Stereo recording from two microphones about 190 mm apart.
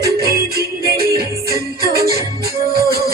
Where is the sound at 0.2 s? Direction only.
55° right (ahead or behind).